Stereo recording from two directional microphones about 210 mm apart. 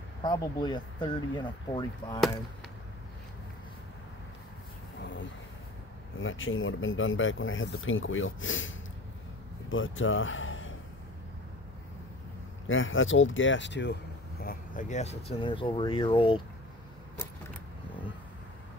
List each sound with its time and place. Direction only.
0.2 s speech: 20° left (ahead or behind)
5.0 s a sound: 60° left (ahead or behind)
6.1 s speech: 65° left (ahead or behind)
12.6 s speech: 65° left (ahead or behind)
14.4 s speech: 40° left (ahead or behind); by 16.4 s 25° left (ahead or behind)